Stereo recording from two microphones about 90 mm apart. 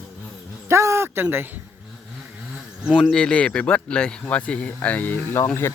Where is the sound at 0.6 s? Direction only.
30° right (ahead or behind).